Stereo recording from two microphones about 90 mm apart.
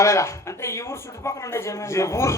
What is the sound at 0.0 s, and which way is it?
Speech, 35° left (ahead or behind).